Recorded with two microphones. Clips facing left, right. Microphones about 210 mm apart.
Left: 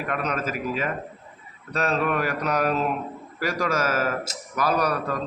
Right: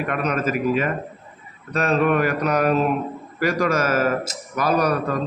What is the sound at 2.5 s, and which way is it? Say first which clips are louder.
Speech: right 3 dB; centre (ahead or behind).